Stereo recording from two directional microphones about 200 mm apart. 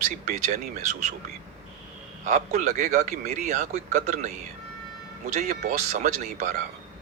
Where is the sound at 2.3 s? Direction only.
35° right (ahead or behind).